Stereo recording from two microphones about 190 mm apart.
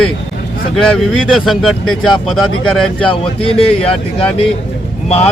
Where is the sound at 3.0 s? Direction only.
30° left (ahead or behind).